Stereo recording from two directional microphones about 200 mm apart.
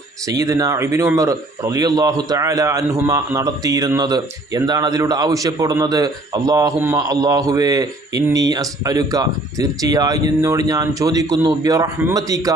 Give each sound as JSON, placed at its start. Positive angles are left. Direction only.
{"t": 0.3, "sound": "speech", "side_deg": -15}